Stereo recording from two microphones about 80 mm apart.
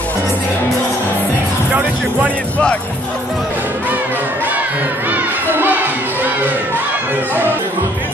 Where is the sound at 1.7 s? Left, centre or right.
Centre.